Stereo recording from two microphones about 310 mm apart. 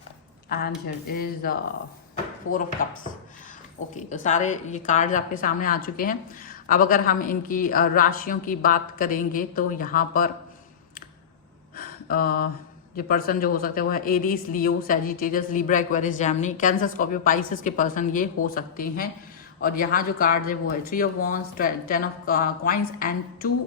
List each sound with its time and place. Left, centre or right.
0.4 s a woman's voice: left
11.8 s a sound: left
13.0 s a woman's voice: left